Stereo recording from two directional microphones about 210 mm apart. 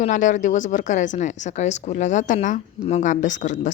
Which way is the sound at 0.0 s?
35° left (ahead or behind).